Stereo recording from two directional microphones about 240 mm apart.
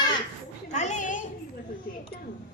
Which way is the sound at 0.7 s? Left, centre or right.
Left.